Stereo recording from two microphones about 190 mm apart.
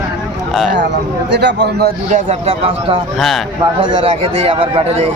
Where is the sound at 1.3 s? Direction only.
65° right (ahead or behind).